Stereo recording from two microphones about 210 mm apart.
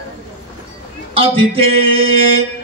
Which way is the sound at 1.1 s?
25° right (ahead or behind).